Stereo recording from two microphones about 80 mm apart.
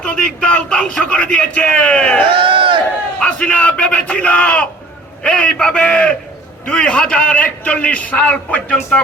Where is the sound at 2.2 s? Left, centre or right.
Right.